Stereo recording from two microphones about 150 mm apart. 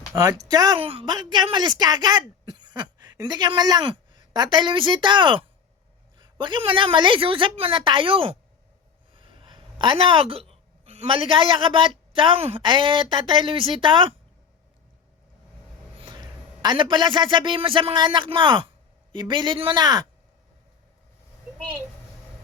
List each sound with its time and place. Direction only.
0.1 s a woman's voice: 25° right (ahead or behind)
16.0 s a man's voice: 30° right (ahead or behind)